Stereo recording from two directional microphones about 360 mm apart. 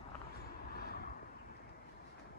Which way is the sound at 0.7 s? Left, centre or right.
Left.